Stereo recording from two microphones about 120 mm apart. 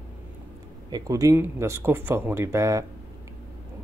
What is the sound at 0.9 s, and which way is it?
Speech, 30° right (ahead or behind).